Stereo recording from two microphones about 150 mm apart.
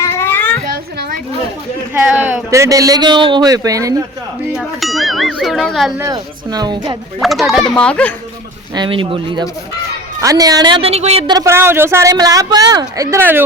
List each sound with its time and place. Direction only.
0.0 s a sound: 15° left (ahead or behind)
0.7 s children playing: 75° right (ahead or behind)
1.9 s speech: 10° right (ahead or behind)
4.5 s speech: centre (ahead or behind)
6.0 s speech: 25° right (ahead or behind)
7.2 s speech: centre (ahead or behind)
8.7 s a woman's voice: 30° right (ahead or behind)
10.2 s a woman's voice: 25° right (ahead or behind); by 11.3 s 45° right (ahead or behind)
11.3 s speech: 20° right (ahead or behind)